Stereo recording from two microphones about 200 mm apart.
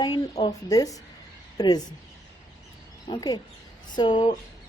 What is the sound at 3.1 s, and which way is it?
A woman's voice, 20° left (ahead or behind).